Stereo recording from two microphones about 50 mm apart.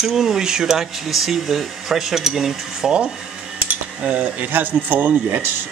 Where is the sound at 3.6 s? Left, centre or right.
Right.